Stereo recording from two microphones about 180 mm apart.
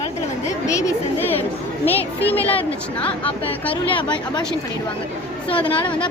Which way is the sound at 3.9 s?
25° left (ahead or behind).